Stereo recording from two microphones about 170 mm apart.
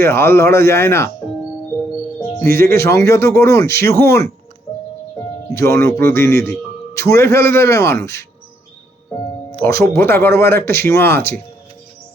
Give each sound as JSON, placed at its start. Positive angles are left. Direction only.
{"t": 0.0, "sound": "a man's voice", "side_deg": 15}
{"t": 2.3, "sound": "a man's voice", "side_deg": 15}
{"t": 5.5, "sound": "a man's voice", "side_deg": 15}
{"t": 9.6, "sound": "a man's voice", "side_deg": 15}